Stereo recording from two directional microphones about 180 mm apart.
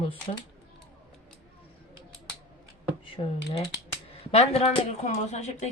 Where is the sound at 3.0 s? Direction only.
30° left (ahead or behind).